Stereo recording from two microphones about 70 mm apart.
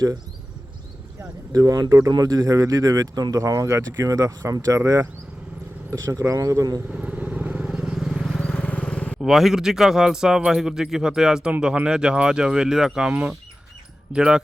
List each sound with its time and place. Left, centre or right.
1.5 s speech: right
2.0 s speech: right
3.4 s speech: right
5.9 s speech: right
6.9 s vehicle: centre
7.7 s vehicle: centre
8.4 s horse: centre
8.6 s vehicle: centre
9.2 s speech: centre